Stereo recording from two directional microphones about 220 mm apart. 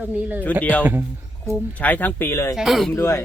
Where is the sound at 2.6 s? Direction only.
Centre (ahead or behind).